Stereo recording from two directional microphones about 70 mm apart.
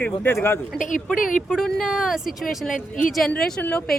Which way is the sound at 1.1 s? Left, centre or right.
Centre.